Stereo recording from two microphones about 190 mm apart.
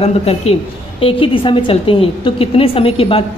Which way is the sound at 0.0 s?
35° left (ahead or behind).